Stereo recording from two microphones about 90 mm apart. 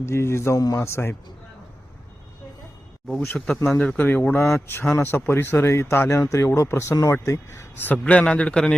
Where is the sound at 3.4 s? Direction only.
10° left (ahead or behind); by 7.6 s 30° left (ahead or behind).